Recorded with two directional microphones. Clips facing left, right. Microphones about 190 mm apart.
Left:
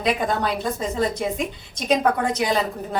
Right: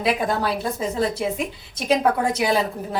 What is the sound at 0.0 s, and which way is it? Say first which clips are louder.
A woman's voice: even; 5° right (ahead or behind).